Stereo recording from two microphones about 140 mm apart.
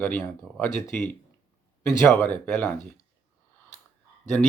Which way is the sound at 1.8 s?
15° left (ahead or behind).